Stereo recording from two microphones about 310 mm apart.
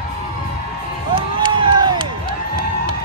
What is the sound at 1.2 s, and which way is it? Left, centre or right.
Crowd, centre.